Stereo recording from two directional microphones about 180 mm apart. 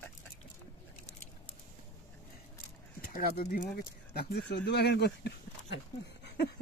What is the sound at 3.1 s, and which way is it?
Speech, 55° left (ahead or behind).